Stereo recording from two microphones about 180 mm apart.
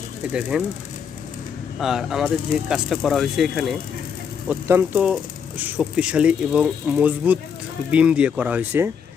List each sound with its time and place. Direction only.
0.5 s speech: 5° right (ahead or behind)
1.8 s speech: centre (ahead or behind)